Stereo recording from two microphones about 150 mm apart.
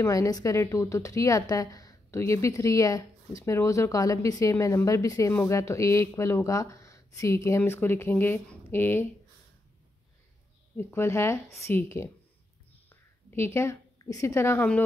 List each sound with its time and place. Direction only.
0.0 s a woman's voice: 20° left (ahead or behind)
10.8 s a woman's voice: 15° left (ahead or behind)